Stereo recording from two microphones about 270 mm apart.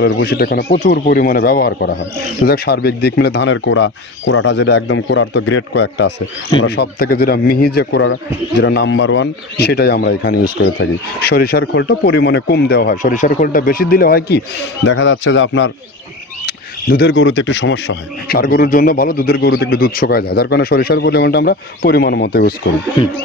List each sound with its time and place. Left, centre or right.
0.0 s speech: left